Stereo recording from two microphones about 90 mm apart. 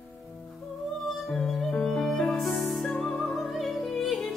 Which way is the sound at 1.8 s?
15° left (ahead or behind).